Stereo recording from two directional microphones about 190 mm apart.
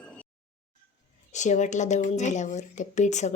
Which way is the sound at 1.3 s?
40° left (ahead or behind).